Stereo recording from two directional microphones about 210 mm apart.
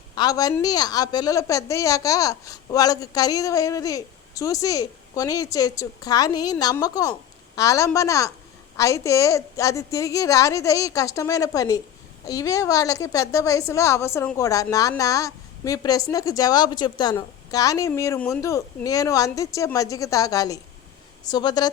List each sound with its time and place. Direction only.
0.2 s a woman's voice: 20° left (ahead or behind)